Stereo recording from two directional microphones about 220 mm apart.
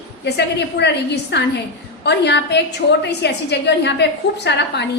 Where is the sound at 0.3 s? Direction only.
50° left (ahead or behind).